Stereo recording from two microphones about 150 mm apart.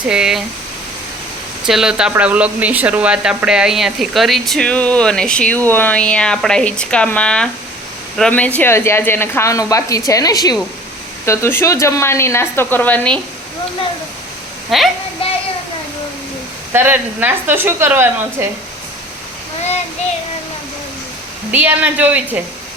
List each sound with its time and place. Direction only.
0.1 s speech: 5° right (ahead or behind)
1.6 s a woman's voice: 5° right (ahead or behind)
14.7 s speech: centre (ahead or behind)
15.2 s a sound: 35° left (ahead or behind)
16.7 s a woman's voice: 15° right (ahead or behind)
21.5 s a woman's voice: 10° right (ahead or behind)